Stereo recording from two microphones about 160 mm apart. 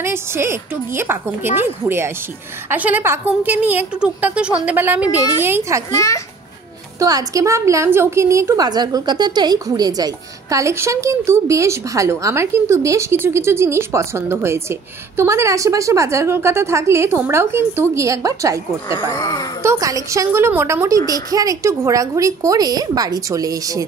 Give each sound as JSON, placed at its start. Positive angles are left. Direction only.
{"t": 0.0, "sound": "a woman's voice", "side_deg": -15}
{"t": 5.9, "sound": "a woman's voice", "side_deg": 20}
{"t": 7.0, "sound": "a woman's voice", "side_deg": -20}
{"t": 19.1, "sound": "a woman's voice", "side_deg": 20}
{"t": 19.6, "sound": "a woman's voice", "side_deg": -20}